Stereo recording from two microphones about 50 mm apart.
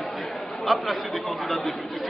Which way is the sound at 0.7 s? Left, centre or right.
Centre.